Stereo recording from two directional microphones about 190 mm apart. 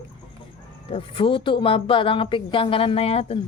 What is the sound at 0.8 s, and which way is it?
Speech, 30° left (ahead or behind).